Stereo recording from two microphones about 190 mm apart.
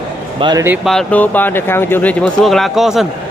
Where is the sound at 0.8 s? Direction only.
5° left (ahead or behind).